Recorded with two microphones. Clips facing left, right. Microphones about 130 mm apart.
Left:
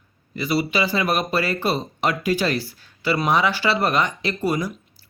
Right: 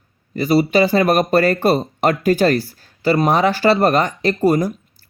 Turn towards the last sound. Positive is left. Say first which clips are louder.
# right 8 dB
turn(degrees=-45)  # may be behind; listen again after turning